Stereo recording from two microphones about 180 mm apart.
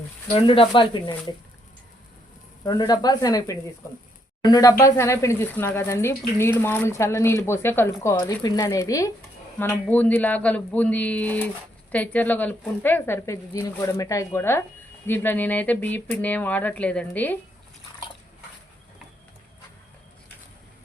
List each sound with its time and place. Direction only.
0.3 s speech: 30° left (ahead or behind)
2.6 s speech: 25° left (ahead or behind)